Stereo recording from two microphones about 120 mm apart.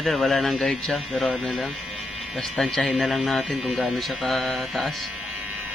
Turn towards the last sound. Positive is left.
turn(degrees=0)  # may be behind; listen again after turning